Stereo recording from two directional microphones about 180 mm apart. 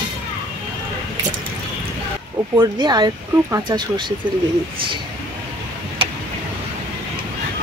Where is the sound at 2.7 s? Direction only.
25° right (ahead or behind).